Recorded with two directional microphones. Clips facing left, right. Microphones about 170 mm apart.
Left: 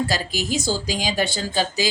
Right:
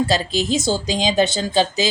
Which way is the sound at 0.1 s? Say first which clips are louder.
Right 5 dB; 25° right (ahead or behind).